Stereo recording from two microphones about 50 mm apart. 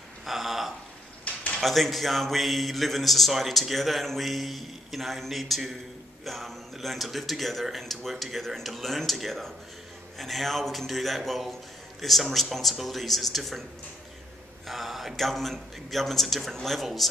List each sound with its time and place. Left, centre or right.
0.2 s a sound: centre
1.6 s speech: centre
14.7 s speech: centre